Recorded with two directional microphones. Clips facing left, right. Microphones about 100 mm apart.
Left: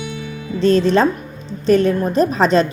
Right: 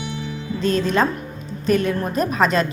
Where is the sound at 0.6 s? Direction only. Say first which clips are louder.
Left 6 dB; 30° left (ahead or behind).